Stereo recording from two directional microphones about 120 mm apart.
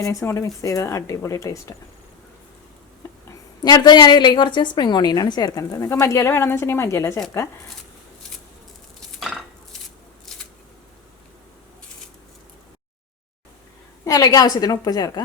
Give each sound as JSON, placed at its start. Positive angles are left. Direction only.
{"t": 0.0, "sound": "speech", "side_deg": 25}
{"t": 3.6, "sound": "a woman's voice", "side_deg": 35}
{"t": 9.0, "sound": "dishes", "side_deg": 0}
{"t": 14.0, "sound": "a woman's voice", "side_deg": 30}